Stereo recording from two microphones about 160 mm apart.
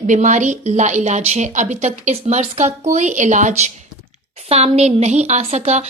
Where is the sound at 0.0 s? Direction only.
45° right (ahead or behind).